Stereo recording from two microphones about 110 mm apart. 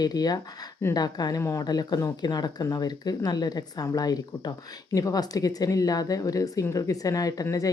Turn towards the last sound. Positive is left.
turn(degrees=35)  # may be behind; listen again after turning